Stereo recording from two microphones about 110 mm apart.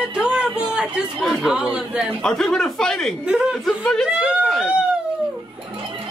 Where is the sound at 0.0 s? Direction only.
10° right (ahead or behind).